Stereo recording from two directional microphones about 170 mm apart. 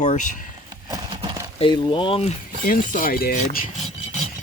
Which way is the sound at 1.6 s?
30° left (ahead or behind).